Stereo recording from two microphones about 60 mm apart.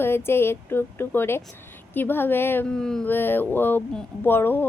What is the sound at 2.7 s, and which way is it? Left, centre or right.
Speech, centre.